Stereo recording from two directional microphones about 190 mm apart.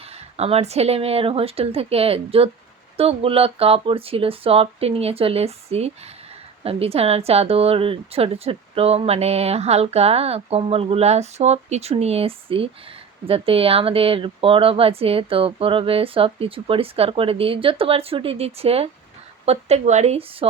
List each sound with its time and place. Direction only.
0.3 s speech: 35° right (ahead or behind)